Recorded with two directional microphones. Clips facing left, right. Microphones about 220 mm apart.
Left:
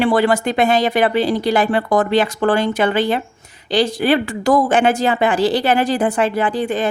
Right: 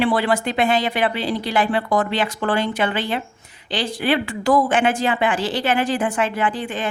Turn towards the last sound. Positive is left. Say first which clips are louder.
# left 5 dB
turn(degrees=40)  # may be behind; listen again after turning